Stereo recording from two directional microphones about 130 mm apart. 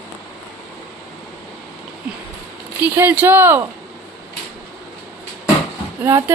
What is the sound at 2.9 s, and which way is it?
Speech, 15° right (ahead or behind).